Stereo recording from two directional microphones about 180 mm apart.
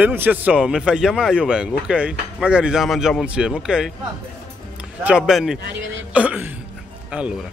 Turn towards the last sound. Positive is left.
turn(degrees=-5)  # may be behind; listen again after turning